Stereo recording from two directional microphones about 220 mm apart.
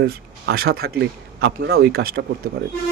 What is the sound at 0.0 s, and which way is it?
Speech, 45° right (ahead or behind).